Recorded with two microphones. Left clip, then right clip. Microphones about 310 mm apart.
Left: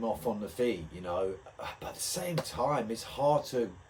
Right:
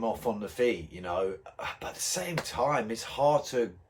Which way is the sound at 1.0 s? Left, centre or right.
Right.